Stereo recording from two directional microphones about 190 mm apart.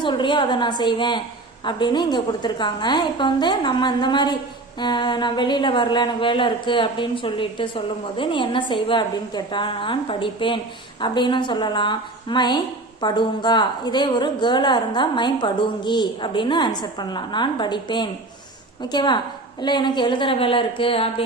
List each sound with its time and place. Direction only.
0.0 s a woman's voice: 25° left (ahead or behind)